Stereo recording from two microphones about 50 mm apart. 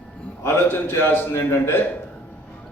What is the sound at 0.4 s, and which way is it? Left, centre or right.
A man's voice, left.